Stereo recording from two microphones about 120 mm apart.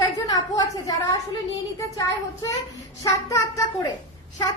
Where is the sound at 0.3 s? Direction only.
30° left (ahead or behind).